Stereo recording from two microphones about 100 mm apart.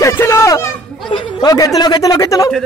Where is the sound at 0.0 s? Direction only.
30° left (ahead or behind).